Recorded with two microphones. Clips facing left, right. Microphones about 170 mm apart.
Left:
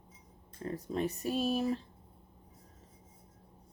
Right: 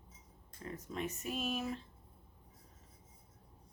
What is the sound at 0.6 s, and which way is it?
Speech, 35° left (ahead or behind).